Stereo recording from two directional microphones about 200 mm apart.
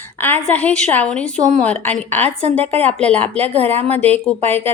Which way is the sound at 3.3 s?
30° right (ahead or behind).